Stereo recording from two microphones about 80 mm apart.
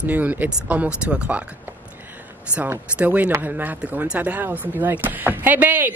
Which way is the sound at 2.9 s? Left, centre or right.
Centre.